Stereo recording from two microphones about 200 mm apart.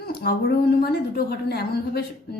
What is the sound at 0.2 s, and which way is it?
A woman's voice, 50° left (ahead or behind).